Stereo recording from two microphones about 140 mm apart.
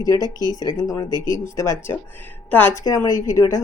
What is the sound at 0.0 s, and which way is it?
Speech, 25° left (ahead or behind).